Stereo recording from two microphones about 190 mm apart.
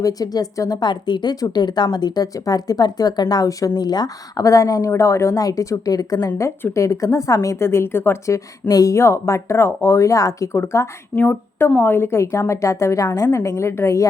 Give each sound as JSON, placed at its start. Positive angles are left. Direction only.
{"t": 0.0, "sound": "speech", "side_deg": 20}